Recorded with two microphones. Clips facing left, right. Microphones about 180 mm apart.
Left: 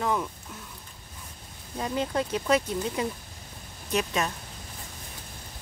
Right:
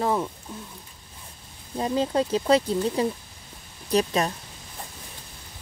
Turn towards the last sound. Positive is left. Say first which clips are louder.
# right 5 dB
turn(degrees=-35)  # may be behind; listen again after turning